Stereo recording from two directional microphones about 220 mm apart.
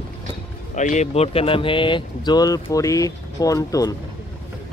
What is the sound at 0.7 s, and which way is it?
Speech, 35° left (ahead or behind).